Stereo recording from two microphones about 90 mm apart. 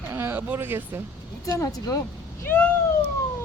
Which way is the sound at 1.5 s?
40° left (ahead or behind).